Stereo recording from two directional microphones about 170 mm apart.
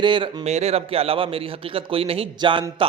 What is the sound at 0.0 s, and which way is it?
A man's voice, 30° right (ahead or behind).